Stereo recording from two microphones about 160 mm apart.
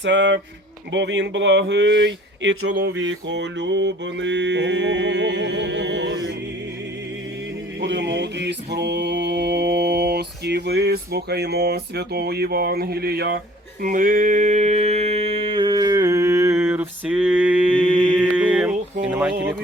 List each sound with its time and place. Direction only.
0.1 s mantra: 90° right
7.9 s mantra: 90° right
13.8 s a sound: 60° right (ahead or behind); by 17.7 s 10° right (ahead or behind)
18.2 s mantra: 5° right (ahead or behind)
19.0 s speech: 10° right (ahead or behind)